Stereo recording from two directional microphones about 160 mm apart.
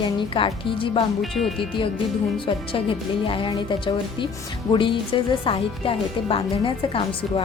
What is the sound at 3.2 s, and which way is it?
A woman's voice, 30° left (ahead or behind).